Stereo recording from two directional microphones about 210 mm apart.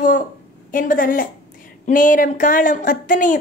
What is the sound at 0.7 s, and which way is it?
A woman's voice, 40° left (ahead or behind).